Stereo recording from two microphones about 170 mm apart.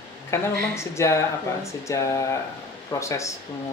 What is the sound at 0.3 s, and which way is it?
Speech, 15° left (ahead or behind).